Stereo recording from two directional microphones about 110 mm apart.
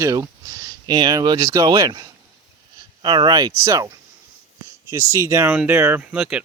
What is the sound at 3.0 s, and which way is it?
Speech, 40° right (ahead or behind).